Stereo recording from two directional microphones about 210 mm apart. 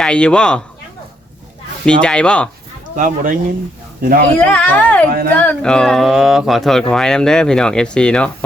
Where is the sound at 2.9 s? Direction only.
40° right (ahead or behind).